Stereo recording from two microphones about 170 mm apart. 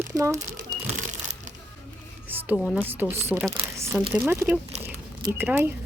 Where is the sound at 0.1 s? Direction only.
20° right (ahead or behind).